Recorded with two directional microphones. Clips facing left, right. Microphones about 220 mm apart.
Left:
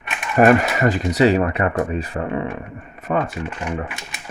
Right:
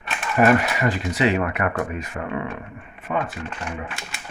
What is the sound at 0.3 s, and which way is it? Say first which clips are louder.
Speech: left 4 dB; 45° left (ahead or behind).